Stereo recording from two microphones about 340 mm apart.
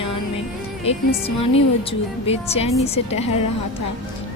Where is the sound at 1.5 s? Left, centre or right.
Centre.